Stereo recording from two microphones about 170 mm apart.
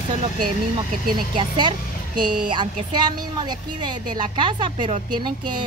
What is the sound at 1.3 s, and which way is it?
Speech, 25° right (ahead or behind).